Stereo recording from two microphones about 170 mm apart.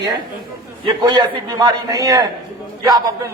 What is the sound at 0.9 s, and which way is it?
A man's voice, 25° right (ahead or behind).